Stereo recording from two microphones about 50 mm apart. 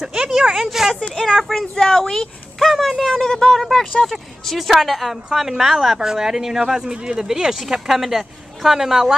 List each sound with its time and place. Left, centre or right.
0.0 s speech: centre
3.1 s speech: centre